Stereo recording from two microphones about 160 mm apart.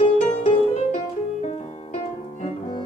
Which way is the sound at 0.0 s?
35° left (ahead or behind).